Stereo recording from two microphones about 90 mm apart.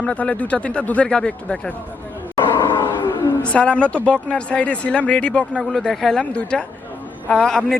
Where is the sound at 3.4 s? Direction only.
15° left (ahead or behind).